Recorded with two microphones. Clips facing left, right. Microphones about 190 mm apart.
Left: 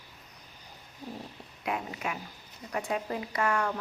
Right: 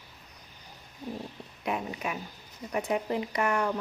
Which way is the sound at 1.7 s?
20° right (ahead or behind).